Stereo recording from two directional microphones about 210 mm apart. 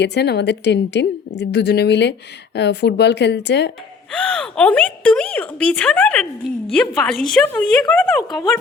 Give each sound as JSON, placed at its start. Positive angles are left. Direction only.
{"t": 0.0, "sound": "a woman's voice", "side_deg": 50}
{"t": 4.1, "sound": "a woman's voice", "side_deg": 5}